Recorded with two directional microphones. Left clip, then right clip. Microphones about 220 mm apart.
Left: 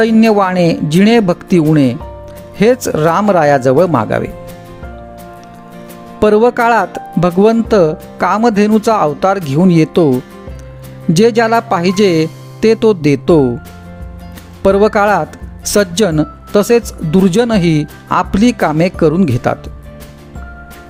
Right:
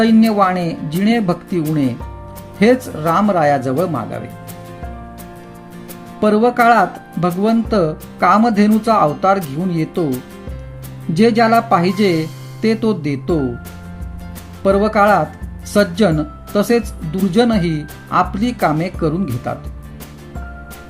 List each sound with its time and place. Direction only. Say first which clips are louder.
0.0 s speech: left 3 dB; 50° left (ahead or behind)
6.1 s speech: left 4 dB; 50° left (ahead or behind)
11.1 s speech: left 3 dB; 50° left (ahead or behind)
14.6 s speech: left 3 dB; 50° left (ahead or behind)